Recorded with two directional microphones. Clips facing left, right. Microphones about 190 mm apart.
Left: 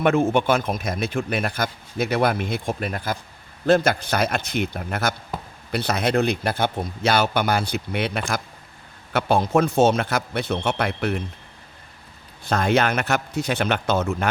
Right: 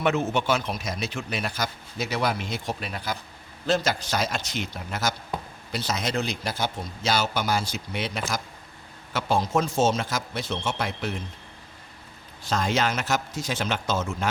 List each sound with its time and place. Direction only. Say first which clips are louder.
0.0 s a man's voice: left 6 dB; 50° left (ahead or behind)
12.5 s speech: left 5 dB; 60° left (ahead or behind)